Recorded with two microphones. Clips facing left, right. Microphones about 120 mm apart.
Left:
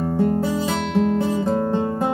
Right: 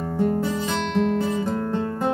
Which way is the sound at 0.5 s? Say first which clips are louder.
Left 3 dB; 10° left (ahead or behind).